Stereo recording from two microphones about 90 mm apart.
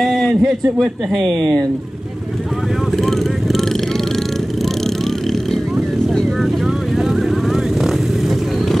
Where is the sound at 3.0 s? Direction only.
5° left (ahead or behind).